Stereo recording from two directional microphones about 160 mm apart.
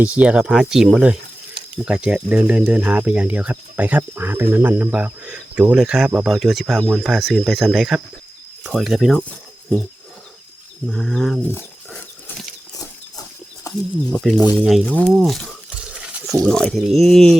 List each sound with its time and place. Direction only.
0.0 s speech: 10° right (ahead or behind)
10.8 s speech: centre (ahead or behind)
13.7 s a sound: 20° left (ahead or behind)
14.1 s speech: centre (ahead or behind)
15.8 s stir: 5° right (ahead or behind)
16.4 s speech: 5° left (ahead or behind)